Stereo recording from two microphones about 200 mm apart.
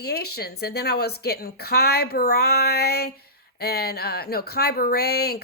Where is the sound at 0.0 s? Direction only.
55° left (ahead or behind).